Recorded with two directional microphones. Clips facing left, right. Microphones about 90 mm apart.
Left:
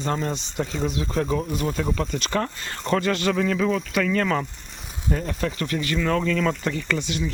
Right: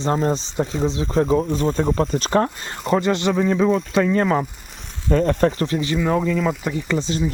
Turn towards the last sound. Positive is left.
turn(degrees=-30)  # may be behind; listen again after turning